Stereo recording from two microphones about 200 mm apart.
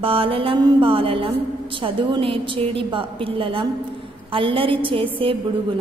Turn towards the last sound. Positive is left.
turn(degrees=-25)  # may be behind; listen again after turning